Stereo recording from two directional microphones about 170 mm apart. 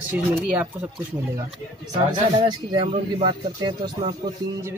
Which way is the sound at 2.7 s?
30° right (ahead or behind).